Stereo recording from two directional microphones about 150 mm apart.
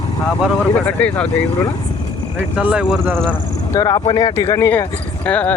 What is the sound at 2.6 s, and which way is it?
Speech, 5° right (ahead or behind).